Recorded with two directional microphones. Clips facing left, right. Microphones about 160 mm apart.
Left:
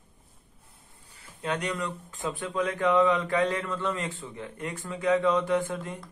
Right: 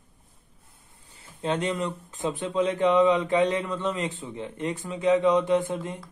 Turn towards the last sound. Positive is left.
turn(degrees=-20)  # may be behind; listen again after turning